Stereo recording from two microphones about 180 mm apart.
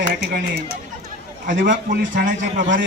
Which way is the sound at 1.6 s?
45° right (ahead or behind).